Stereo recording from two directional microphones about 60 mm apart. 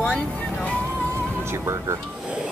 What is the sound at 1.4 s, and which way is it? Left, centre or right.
Speech, right.